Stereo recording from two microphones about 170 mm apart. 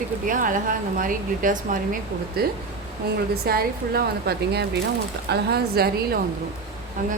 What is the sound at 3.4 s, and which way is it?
A woman's voice, 65° right (ahead or behind).